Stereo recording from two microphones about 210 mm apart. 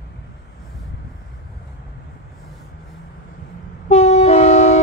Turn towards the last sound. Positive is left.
turn(degrees=35)  # may be behind; listen again after turning